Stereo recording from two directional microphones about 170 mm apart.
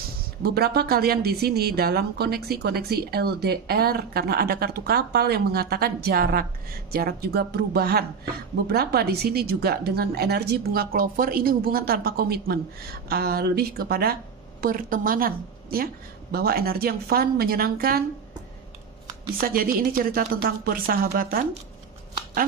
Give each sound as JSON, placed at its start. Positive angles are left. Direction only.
{"t": 0.4, "sound": "a woman's voice", "side_deg": -65}
{"t": 19.4, "sound": "speech", "side_deg": -60}